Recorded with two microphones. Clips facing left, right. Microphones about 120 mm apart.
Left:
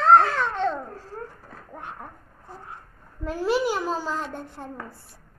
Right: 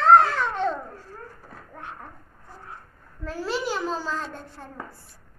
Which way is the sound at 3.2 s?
15° left (ahead or behind).